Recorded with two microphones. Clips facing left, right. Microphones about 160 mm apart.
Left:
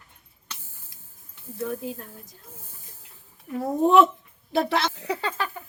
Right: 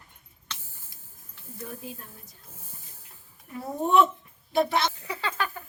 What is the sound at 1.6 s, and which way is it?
Speech, 80° left.